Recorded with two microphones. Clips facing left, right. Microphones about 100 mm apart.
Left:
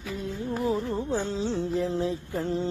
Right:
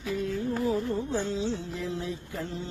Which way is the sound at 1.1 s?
40° left (ahead or behind).